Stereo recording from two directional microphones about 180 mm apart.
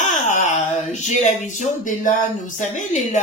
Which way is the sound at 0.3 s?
45° left (ahead or behind).